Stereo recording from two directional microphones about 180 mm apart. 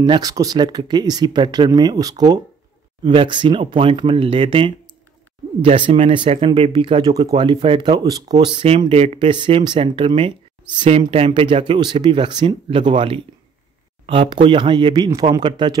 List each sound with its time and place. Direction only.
0.0 s speech: 20° right (ahead or behind)